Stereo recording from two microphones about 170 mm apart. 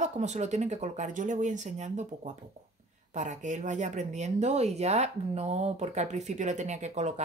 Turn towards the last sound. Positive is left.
turn(degrees=-40)  # may be behind; listen again after turning